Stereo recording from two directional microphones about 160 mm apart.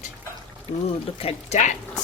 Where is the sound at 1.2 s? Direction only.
40° left (ahead or behind).